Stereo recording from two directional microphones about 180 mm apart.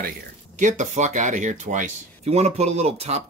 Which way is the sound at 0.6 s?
45° right (ahead or behind).